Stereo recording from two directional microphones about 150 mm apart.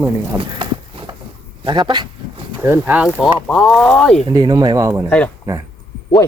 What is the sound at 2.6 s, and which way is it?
Speech, 15° right (ahead or behind).